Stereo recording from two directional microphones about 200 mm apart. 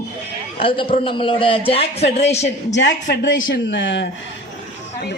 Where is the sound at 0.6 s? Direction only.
25° left (ahead or behind).